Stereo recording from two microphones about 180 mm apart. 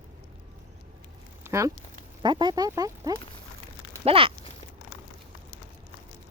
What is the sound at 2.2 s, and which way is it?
Speech, 25° right (ahead or behind).